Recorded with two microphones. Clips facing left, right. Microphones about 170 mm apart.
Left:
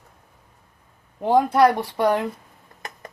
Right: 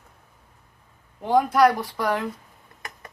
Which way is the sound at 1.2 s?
25° left (ahead or behind).